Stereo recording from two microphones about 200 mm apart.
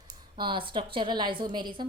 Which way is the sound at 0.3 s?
25° right (ahead or behind).